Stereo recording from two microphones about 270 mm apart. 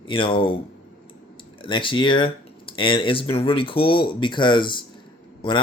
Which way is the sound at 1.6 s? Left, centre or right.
Centre.